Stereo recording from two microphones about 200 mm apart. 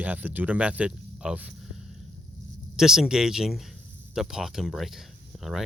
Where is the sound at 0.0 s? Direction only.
5° right (ahead or behind).